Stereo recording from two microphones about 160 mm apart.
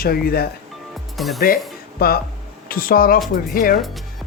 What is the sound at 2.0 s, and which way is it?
Speech, 70° left (ahead or behind).